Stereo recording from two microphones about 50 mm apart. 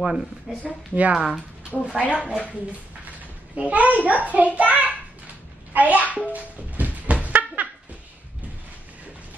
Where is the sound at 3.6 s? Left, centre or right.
Right.